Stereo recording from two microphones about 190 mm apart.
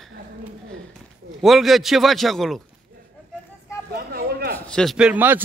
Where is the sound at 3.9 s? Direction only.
55° right (ahead or behind).